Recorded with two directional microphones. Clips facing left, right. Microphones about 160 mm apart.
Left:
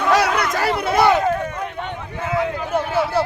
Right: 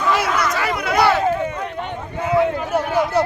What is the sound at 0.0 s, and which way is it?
Chatter, 65° left (ahead or behind).